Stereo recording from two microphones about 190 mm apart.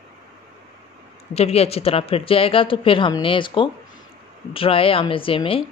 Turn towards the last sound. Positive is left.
turn(degrees=30)  # may be behind; listen again after turning